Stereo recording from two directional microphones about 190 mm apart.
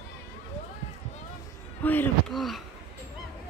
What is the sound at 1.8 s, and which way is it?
Speech, 10° left (ahead or behind).